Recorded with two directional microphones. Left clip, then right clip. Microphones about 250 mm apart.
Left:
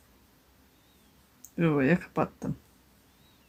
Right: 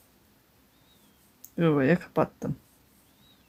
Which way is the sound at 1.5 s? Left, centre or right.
Centre.